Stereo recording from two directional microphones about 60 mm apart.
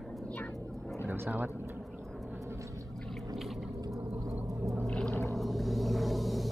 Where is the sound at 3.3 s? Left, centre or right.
Centre.